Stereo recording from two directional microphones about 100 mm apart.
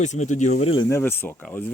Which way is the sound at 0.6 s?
70° left (ahead or behind).